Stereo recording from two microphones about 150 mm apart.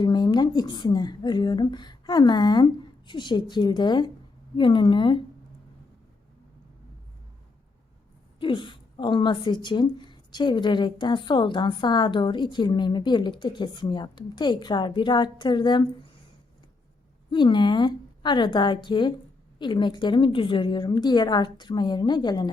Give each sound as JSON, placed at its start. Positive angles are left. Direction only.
{"t": 0.0, "sound": "a woman's voice", "side_deg": 30}
{"t": 8.4, "sound": "a woman's voice", "side_deg": 35}
{"t": 17.3, "sound": "a woman's voice", "side_deg": 30}